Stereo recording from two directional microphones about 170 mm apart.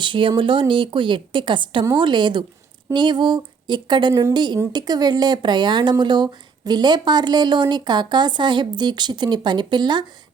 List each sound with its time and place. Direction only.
0.0 s speech: 30° right (ahead or behind)